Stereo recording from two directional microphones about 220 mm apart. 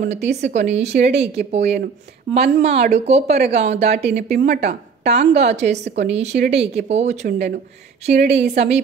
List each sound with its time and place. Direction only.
0.0 s a woman's voice: 30° right (ahead or behind)